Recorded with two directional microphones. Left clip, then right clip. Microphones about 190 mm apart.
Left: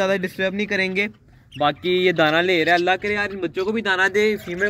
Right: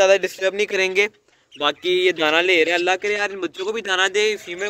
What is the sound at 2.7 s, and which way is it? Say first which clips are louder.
A man's voice: left 1 dB; 30° right (ahead or behind).